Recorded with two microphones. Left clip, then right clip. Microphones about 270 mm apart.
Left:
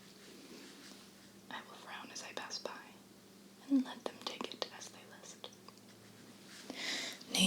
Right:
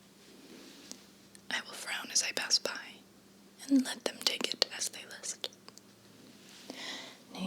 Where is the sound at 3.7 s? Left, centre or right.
Centre.